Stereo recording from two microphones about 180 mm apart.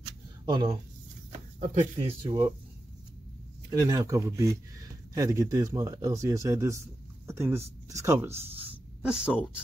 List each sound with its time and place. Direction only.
0.0 s a sound: 30° right (ahead or behind)
2.0 s speech: 30° right (ahead or behind)
3.7 s speech: 20° right (ahead or behind)